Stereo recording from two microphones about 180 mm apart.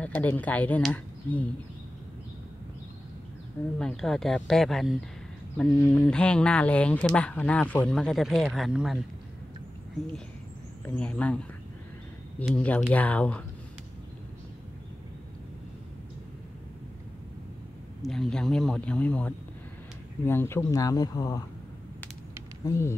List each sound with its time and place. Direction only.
0.0 s speech: 10° left (ahead or behind)
3.7 s speech: 5° left (ahead or behind)
10.9 s speech: 5° left (ahead or behind)
18.0 s speech: centre (ahead or behind); by 21.5 s 20° left (ahead or behind)
22.7 s speech: 15° left (ahead or behind)